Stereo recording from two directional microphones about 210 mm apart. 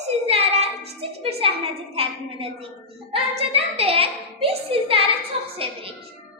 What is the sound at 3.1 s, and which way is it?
A woman's voice, 30° right (ahead or behind).